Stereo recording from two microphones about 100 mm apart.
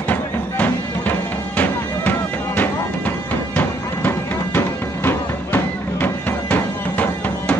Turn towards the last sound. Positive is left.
turn(degrees=15)  # may be behind; listen again after turning